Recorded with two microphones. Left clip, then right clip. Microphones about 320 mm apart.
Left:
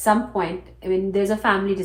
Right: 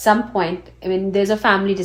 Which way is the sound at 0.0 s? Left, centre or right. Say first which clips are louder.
Right 4 dB; right.